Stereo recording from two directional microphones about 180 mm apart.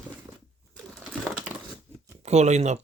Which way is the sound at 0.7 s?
Centre (ahead or behind).